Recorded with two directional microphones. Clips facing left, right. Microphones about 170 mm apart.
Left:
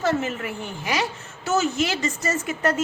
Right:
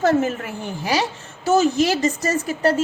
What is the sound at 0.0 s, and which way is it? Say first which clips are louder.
A woman's voice: right 5 dB; 45° right (ahead or behind).